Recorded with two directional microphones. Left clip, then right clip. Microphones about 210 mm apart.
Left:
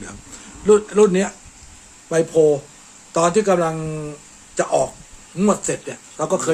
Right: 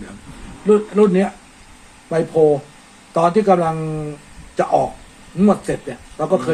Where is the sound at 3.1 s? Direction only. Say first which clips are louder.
Right 2 dB; 20° left (ahead or behind).